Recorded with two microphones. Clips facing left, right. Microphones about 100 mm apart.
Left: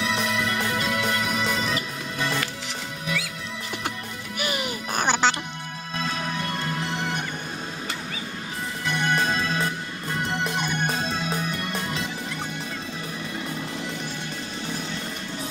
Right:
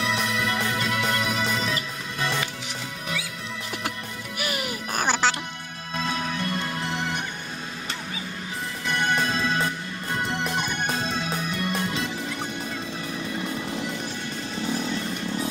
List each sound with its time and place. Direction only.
4.4 s music: centre (ahead or behind)